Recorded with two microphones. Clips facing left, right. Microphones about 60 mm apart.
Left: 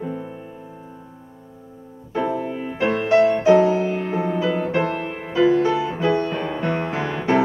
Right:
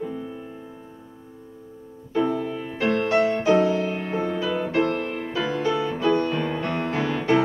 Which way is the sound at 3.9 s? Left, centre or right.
Centre.